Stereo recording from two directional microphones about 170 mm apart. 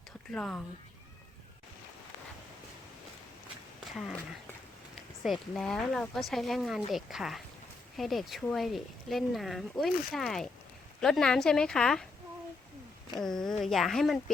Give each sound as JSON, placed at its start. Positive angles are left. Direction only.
{"t": 0.3, "sound": "speech", "side_deg": 5}
{"t": 5.2, "sound": "speech", "side_deg": 0}
{"t": 13.1, "sound": "speech", "side_deg": 0}